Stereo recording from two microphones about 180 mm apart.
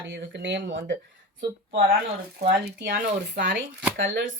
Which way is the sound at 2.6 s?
65° right (ahead or behind).